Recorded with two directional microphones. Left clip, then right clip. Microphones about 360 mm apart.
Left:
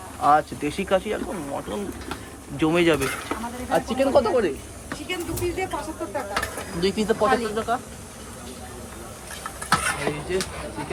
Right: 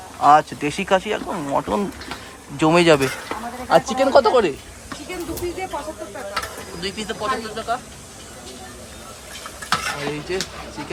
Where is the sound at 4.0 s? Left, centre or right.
Right.